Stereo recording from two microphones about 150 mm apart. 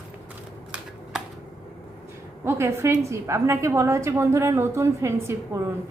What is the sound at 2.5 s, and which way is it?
A woman's voice, 15° right (ahead or behind).